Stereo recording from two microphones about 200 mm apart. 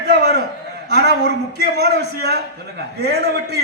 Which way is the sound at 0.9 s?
55° right (ahead or behind).